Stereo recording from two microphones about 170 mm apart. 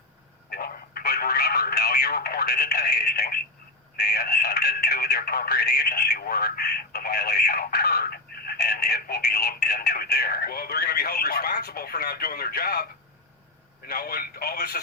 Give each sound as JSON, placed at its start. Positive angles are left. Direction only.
{"t": 0.5, "sound": "telephone", "side_deg": 60}
{"t": 3.9, "sound": "speech", "side_deg": 65}